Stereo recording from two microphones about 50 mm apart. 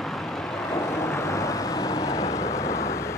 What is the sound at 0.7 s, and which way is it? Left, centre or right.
Vehicle, left.